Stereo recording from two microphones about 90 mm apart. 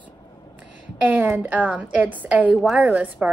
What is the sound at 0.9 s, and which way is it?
A woman's voice, 20° right (ahead or behind).